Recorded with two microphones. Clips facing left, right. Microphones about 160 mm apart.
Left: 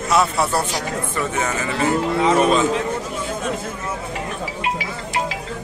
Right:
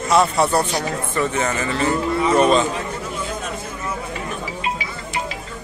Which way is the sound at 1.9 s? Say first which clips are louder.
Left 2 dB; 90° left.